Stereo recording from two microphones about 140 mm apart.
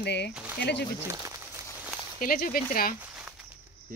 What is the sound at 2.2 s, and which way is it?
Speech, 90° left.